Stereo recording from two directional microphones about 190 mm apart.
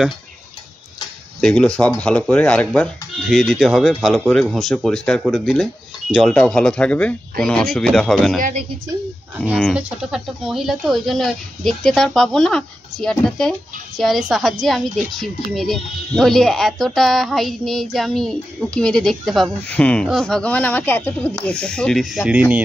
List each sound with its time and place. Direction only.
1.4 s speech: 5° left (ahead or behind)
8.4 s speech: 40° right (ahead or behind)
9.4 s speech: centre (ahead or behind)